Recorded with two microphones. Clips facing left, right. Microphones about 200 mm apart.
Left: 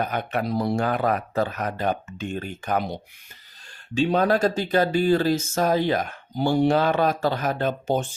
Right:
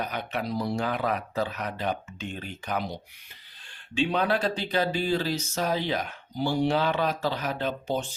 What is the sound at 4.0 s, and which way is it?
Speech, 40° left (ahead or behind).